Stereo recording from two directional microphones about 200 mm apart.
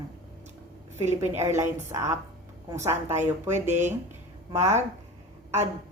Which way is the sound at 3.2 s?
35° right (ahead or behind).